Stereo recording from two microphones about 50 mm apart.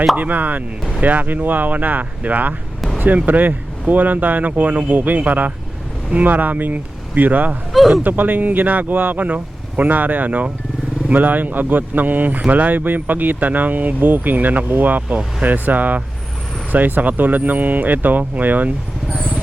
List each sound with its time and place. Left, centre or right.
0.2 s speech: right